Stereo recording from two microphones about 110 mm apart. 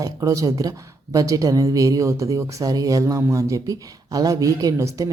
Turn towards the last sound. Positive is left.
turn(degrees=-30)  # may be behind; listen again after turning